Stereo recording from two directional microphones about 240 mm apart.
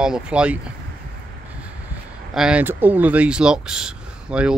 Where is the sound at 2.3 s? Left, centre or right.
Centre.